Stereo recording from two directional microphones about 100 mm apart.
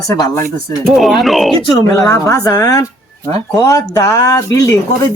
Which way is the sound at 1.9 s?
35° left (ahead or behind).